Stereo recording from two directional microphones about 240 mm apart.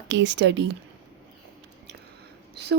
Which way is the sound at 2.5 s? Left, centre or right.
Right.